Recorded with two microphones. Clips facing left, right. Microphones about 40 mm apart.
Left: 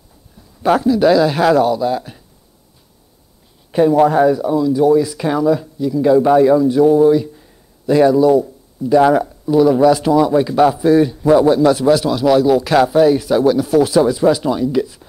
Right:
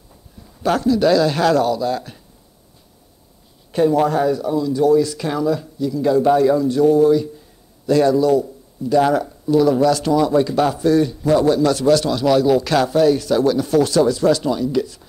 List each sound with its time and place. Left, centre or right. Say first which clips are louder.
0.6 s speech: left 4 dB; centre
3.7 s speech: left 4 dB; centre